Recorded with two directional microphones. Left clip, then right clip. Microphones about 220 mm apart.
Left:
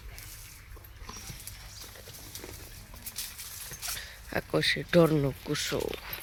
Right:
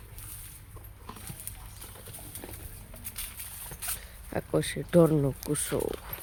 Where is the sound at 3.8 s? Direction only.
Centre (ahead or behind).